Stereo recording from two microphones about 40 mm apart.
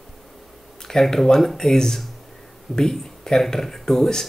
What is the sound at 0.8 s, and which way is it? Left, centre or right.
Speech, centre.